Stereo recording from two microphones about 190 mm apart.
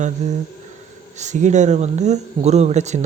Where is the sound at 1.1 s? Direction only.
40° right (ahead or behind).